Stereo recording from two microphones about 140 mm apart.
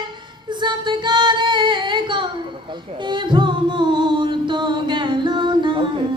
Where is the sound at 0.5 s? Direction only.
35° right (ahead or behind).